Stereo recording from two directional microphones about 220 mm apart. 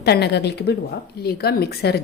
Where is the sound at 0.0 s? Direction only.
50° left (ahead or behind).